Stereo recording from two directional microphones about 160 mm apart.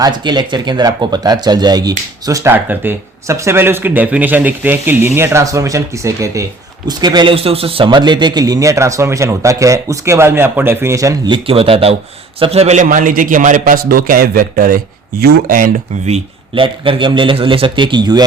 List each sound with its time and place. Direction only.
0.0 s speech: 25° right (ahead or behind)
11.4 s a man's voice: 35° right (ahead or behind)
16.6 s a man's voice: 30° right (ahead or behind)